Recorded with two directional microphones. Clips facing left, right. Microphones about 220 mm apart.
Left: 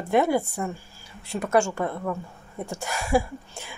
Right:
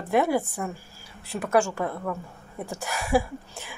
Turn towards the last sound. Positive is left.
turn(degrees=0)  # may be behind; listen again after turning